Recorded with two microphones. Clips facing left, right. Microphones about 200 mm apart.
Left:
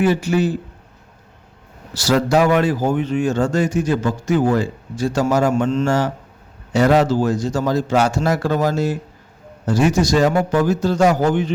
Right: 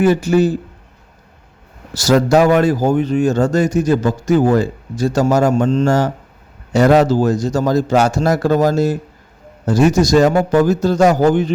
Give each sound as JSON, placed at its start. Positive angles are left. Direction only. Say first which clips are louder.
{"t": 0.0, "sound": "speech", "louder": "right 4 dB", "side_deg": -45}
{"t": 1.9, "sound": "speech", "louder": "right 4 dB", "side_deg": -45}